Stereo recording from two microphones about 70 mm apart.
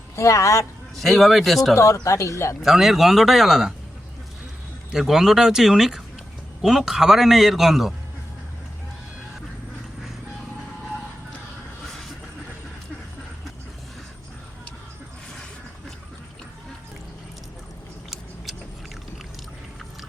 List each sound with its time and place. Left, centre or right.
0.2 s speech: left
0.9 s a man's voice: centre
1.7 s speech: left
2.6 s a man's voice: centre
4.9 s a man's voice: centre